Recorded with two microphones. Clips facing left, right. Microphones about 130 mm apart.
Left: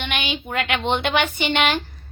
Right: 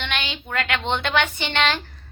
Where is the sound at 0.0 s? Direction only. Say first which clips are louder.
Left 3 dB; 15° left (ahead or behind).